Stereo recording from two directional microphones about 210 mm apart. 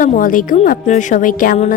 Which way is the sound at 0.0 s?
40° left (ahead or behind).